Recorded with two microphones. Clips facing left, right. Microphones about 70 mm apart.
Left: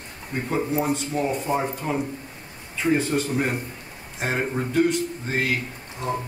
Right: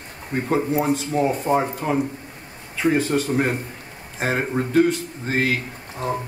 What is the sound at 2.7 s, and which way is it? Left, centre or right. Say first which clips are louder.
A man's voice: right 2 dB; right.